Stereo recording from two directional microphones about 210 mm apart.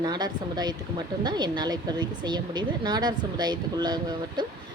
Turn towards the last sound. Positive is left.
turn(degrees=-20)  # may be behind; listen again after turning